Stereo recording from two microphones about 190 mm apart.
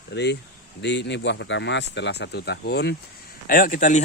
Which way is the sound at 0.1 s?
60° left (ahead or behind).